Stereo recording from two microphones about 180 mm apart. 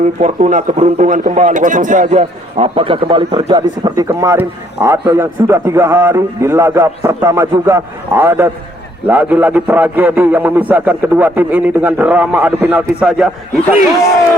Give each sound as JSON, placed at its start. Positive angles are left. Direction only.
{"t": 0.2, "sound": "a man's voice", "side_deg": -40}